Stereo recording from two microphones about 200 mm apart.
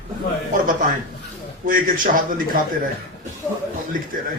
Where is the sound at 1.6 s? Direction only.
45° right (ahead or behind).